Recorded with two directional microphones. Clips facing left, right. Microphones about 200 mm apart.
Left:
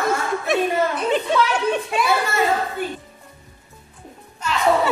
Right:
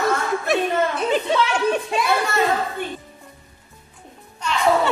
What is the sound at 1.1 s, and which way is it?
Speech, centre (ahead or behind).